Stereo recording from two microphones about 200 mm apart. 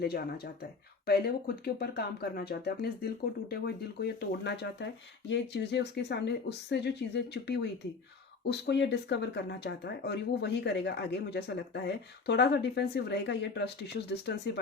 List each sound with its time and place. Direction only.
0.0 s speech: 50° left (ahead or behind)